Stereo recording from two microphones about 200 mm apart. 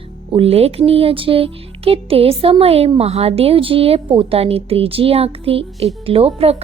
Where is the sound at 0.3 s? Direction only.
30° right (ahead or behind).